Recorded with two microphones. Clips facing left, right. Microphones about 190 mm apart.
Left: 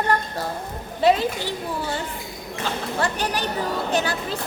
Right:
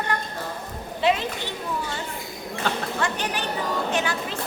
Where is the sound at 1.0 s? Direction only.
35° left (ahead or behind).